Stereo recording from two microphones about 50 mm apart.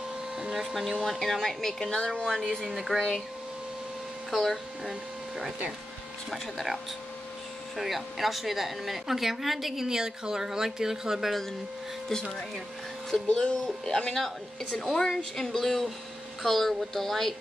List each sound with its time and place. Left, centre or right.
0.4 s vacuum cleaner: centre
1.2 s speech: centre
2.7 s a woman's voice: centre
4.3 s a woman's voice: centre
6.3 s a woman's voice: centre
13.3 s a woman's voice: centre